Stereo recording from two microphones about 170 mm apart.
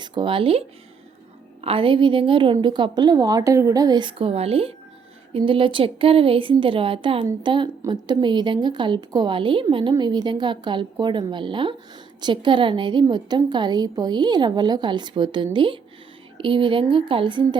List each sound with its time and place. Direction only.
0.0 s speech: 25° right (ahead or behind)
1.6 s a woman's voice: 30° right (ahead or behind)